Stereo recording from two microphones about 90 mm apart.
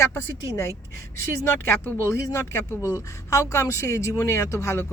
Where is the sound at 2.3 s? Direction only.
35° left (ahead or behind).